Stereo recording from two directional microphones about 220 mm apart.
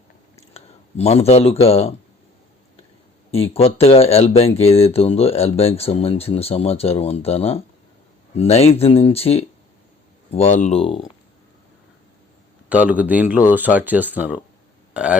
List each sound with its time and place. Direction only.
0.5 s speech: 30° left (ahead or behind)
3.3 s speech: 25° left (ahead or behind)
12.6 s speech: 5° right (ahead or behind)